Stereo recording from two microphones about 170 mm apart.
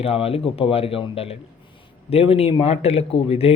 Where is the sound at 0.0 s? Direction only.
35° left (ahead or behind).